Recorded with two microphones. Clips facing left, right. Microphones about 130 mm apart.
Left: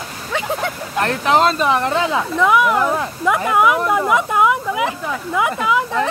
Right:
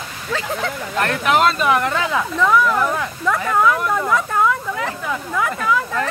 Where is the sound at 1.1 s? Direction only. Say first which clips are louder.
Left 2 dB; 30° left (ahead or behind).